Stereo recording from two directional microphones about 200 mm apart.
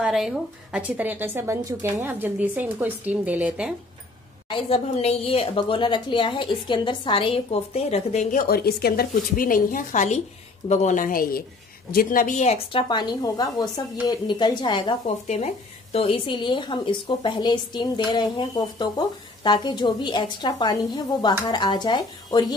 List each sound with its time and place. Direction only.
0.0 s speech: centre (ahead or behind)
4.5 s a woman's voice: 30° left (ahead or behind)
12.8 s a woman's voice: 20° left (ahead or behind)
15.2 s a woman's voice: 35° left (ahead or behind)